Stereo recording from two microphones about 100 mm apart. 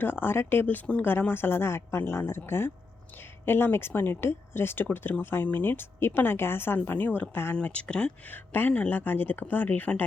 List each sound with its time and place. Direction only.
0.0 s speech: 20° left (ahead or behind)